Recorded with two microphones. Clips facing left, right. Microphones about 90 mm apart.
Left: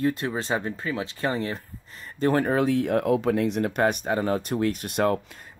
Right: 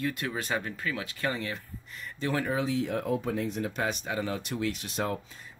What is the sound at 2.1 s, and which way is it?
Speech, 45° left (ahead or behind).